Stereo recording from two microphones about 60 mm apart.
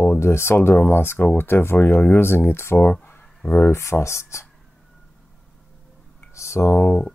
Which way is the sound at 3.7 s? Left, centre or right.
Left.